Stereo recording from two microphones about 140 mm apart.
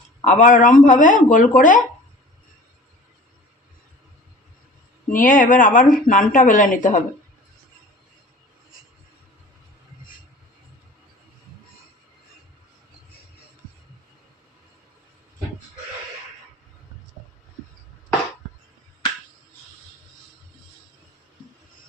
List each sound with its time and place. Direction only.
0.3 s speech: 65° left (ahead or behind)
5.1 s speech: 70° left (ahead or behind)